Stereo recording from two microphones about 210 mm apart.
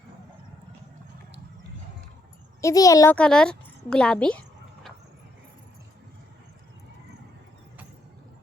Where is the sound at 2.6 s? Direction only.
15° left (ahead or behind).